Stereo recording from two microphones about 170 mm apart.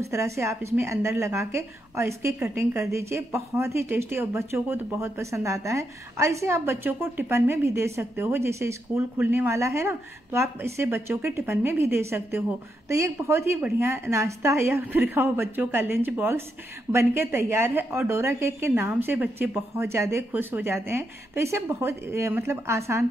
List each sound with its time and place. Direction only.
0.0 s speech: 15° right (ahead or behind)